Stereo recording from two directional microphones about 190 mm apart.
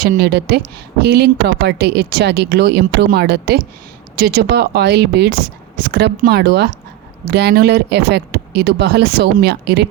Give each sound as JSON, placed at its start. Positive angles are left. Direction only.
{"t": 0.0, "sound": "speech", "side_deg": -55}